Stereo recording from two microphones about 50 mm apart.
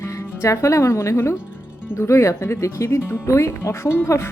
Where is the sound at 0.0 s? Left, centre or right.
Left.